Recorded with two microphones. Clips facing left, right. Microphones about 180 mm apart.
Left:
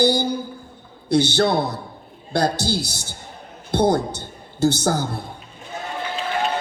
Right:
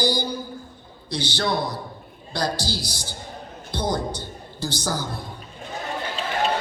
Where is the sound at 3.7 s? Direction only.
55° left (ahead or behind).